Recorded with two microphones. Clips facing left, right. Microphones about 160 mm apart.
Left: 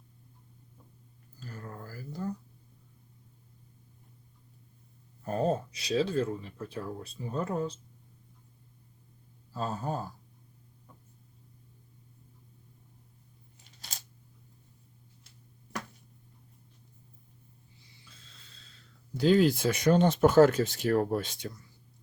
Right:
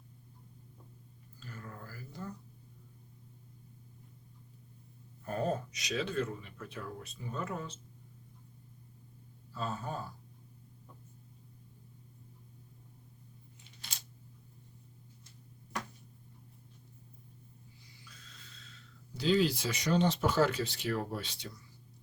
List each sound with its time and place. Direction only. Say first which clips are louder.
1.4 s a sound: left 4 dB; 40° left (ahead or behind)
5.2 s speech: left 5 dB; 30° left (ahead or behind)
9.5 s speech: left 5 dB; 40° left (ahead or behind)
18.0 s snort: right 2 dB; 30° left (ahead or behind)
19.1 s speech: left 6 dB; 50° left (ahead or behind)